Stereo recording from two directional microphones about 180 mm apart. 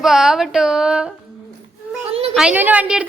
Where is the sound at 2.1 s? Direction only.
35° right (ahead or behind).